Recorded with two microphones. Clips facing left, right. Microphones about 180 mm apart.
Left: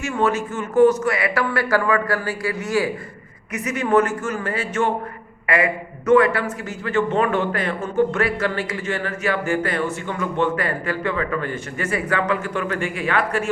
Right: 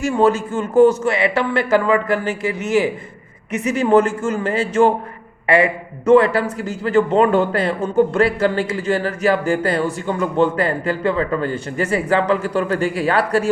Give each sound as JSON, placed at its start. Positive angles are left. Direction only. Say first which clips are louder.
{"t": 0.0, "sound": "a man's voice", "louder": "right 5 dB", "side_deg": -30}